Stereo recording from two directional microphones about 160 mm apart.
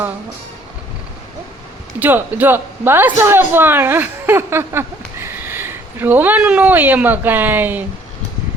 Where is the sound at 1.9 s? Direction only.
10° right (ahead or behind).